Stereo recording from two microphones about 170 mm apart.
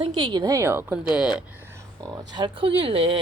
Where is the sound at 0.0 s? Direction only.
30° right (ahead or behind).